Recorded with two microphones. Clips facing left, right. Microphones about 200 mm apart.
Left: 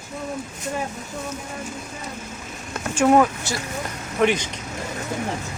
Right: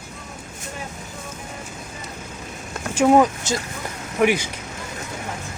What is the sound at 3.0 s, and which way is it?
Speech, 10° right (ahead or behind).